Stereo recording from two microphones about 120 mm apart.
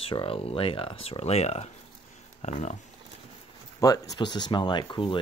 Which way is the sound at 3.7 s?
30° left (ahead or behind).